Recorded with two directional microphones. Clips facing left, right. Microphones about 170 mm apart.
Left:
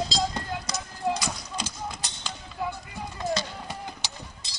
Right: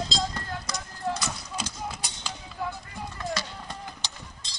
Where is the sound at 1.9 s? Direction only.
5° right (ahead or behind).